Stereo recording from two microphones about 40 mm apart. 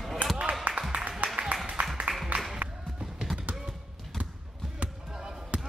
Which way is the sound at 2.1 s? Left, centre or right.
Centre.